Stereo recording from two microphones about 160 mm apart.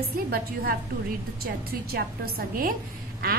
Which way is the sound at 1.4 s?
70° right (ahead or behind).